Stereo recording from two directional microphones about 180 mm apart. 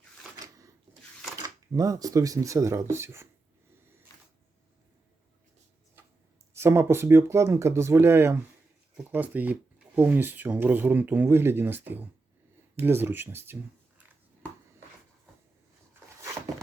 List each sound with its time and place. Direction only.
1.7 s speech: 20° right (ahead or behind)
6.5 s speech: 15° right (ahead or behind)